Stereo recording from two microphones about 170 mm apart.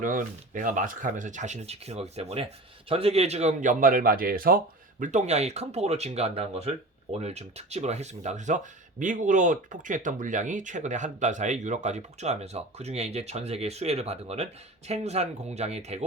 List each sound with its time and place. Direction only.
0.0 s speech: 50° right (ahead or behind)